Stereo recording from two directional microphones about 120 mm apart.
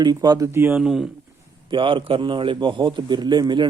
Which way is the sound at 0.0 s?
35° right (ahead or behind).